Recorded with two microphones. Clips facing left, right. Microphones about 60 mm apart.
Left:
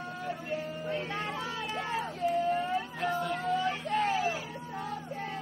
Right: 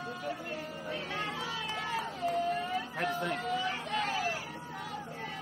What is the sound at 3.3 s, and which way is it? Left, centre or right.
Vehicle, left.